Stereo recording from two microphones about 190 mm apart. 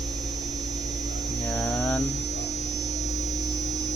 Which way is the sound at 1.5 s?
Centre (ahead or behind).